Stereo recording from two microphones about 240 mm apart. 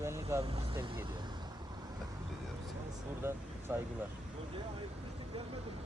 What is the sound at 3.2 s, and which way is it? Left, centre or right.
Speech, centre.